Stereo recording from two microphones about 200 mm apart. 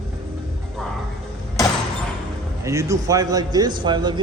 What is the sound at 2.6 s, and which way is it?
A man's voice, 15° right (ahead or behind).